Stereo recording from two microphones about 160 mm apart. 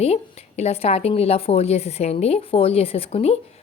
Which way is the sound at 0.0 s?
40° left (ahead or behind).